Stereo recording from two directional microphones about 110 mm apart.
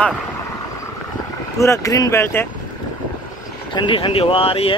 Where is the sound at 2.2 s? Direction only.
20° left (ahead or behind).